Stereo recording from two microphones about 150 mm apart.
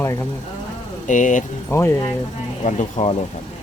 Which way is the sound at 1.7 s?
15° left (ahead or behind).